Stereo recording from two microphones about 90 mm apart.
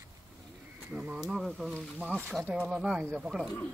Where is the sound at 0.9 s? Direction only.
10° right (ahead or behind).